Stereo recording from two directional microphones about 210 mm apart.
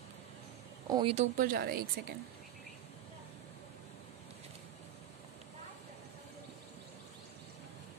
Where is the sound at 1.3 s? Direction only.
45° right (ahead or behind).